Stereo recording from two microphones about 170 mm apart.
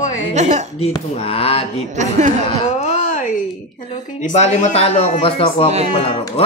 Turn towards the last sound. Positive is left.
turn(degrees=-40)  # may be behind; listen again after turning